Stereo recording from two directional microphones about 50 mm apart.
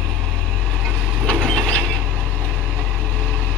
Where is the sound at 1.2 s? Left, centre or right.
Centre.